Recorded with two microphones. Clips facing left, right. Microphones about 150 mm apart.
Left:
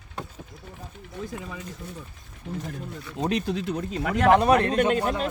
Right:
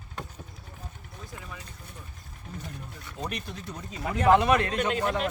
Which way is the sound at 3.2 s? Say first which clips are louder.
Left 10 dB; 90° left.